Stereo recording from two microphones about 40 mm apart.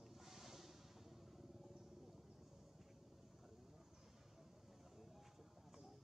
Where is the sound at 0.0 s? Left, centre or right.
Centre.